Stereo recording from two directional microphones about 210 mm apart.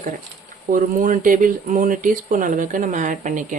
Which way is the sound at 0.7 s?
40° right (ahead or behind).